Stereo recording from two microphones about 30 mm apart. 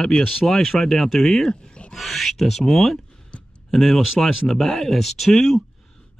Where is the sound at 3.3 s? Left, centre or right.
Left.